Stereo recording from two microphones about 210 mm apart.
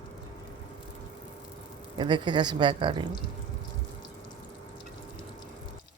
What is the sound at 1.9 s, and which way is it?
Speech, 20° right (ahead or behind).